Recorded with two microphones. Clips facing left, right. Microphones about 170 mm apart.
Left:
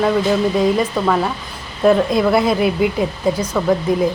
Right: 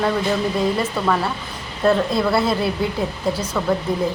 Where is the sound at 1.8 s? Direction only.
15° left (ahead or behind).